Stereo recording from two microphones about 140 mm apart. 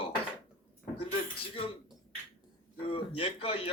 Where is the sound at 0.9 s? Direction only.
40° left (ahead or behind).